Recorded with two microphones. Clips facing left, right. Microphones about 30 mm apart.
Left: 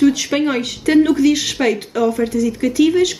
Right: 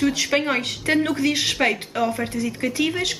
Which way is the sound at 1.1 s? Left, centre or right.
Centre.